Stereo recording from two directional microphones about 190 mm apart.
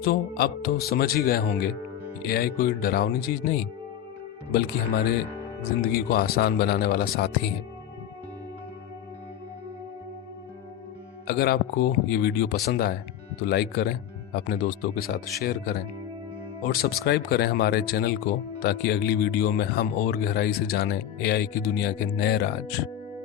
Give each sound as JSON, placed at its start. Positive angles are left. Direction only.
{"t": 0.0, "sound": "speech", "side_deg": 55}
{"t": 11.3, "sound": "speech", "side_deg": 55}